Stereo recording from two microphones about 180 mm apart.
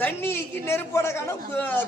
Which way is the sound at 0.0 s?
15° left (ahead or behind).